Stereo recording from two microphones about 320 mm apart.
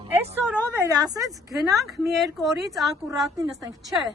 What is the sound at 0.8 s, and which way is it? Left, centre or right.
Speech, centre.